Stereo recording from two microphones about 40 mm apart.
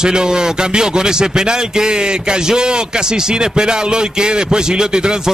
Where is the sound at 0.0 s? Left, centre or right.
Centre.